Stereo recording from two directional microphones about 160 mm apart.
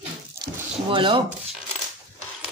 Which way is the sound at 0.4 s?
30° right (ahead or behind).